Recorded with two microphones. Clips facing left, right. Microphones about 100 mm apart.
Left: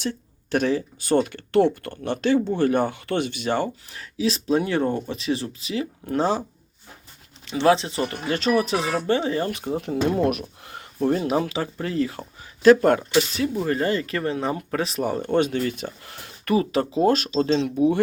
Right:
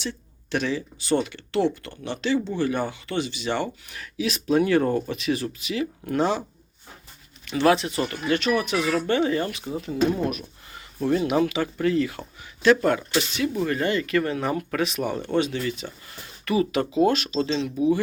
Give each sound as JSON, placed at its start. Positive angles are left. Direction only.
{"t": 0.0, "sound": "speech", "side_deg": 45}
{"t": 7.4, "sound": "speech", "side_deg": 25}
{"t": 9.5, "sound": "speech", "side_deg": 55}
{"t": 10.7, "sound": "a sound", "side_deg": 55}
{"t": 11.1, "sound": "speech", "side_deg": 35}
{"t": 12.6, "sound": "speech", "side_deg": 40}
{"t": 16.6, "sound": "speech", "side_deg": 35}